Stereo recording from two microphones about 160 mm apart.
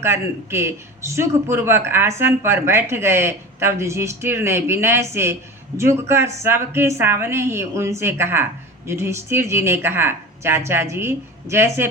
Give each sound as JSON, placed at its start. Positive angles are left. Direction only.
{"t": 0.0, "sound": "a man's voice", "side_deg": -15}